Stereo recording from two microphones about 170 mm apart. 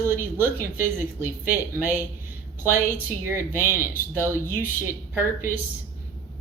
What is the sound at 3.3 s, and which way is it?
A woman's voice, 15° right (ahead or behind).